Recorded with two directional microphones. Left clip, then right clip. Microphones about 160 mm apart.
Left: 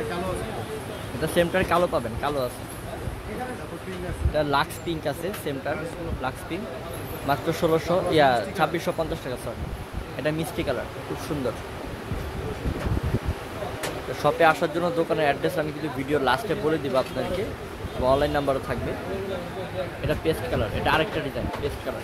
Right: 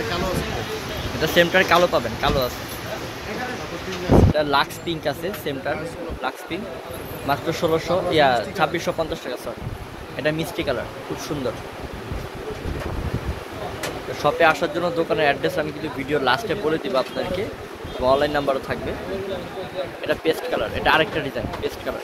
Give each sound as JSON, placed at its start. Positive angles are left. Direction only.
{"t": 1.2, "sound": "speech", "side_deg": 0}
{"t": 4.4, "sound": "speech", "side_deg": 5}
{"t": 7.2, "sound": "speech", "side_deg": 20}
{"t": 10.2, "sound": "speech", "side_deg": 5}
{"t": 14.2, "sound": "speech", "side_deg": 20}
{"t": 18.0, "sound": "speech", "side_deg": 10}
{"t": 20.1, "sound": "speech", "side_deg": 0}